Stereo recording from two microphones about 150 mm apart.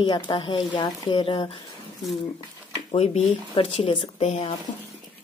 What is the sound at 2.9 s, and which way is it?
Speech, 40° left (ahead or behind).